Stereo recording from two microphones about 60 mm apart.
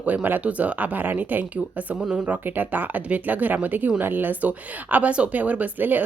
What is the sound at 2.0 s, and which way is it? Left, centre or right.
Speech, centre.